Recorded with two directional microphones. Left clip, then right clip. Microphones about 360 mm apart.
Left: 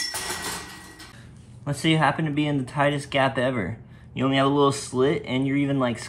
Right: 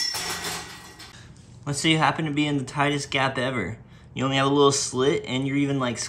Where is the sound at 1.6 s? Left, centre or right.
Centre.